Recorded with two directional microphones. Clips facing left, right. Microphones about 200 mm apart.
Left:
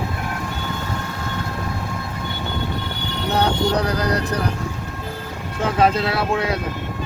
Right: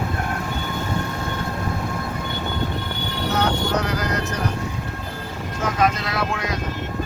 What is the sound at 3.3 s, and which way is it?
Vehicle, 35° left (ahead or behind).